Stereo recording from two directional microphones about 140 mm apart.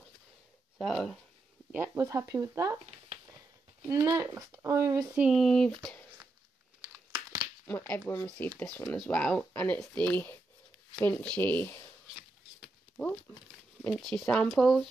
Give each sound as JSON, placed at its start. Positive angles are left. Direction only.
{"t": 0.7, "sound": "speech", "side_deg": 5}
{"t": 1.7, "sound": "speech", "side_deg": -20}
{"t": 3.8, "sound": "speech", "side_deg": -25}
{"t": 5.1, "sound": "speech", "side_deg": -5}
{"t": 7.6, "sound": "speech", "side_deg": 10}
{"t": 13.8, "sound": "speech", "side_deg": 0}